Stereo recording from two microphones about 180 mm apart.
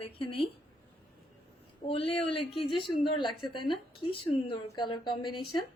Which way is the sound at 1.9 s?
30° left (ahead or behind).